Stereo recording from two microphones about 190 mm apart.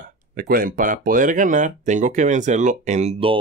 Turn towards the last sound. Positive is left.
turn(degrees=-30)  # may be behind; listen again after turning